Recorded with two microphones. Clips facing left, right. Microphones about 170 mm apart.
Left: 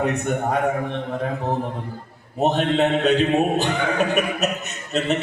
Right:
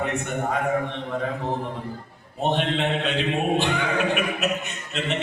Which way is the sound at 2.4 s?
40° left (ahead or behind).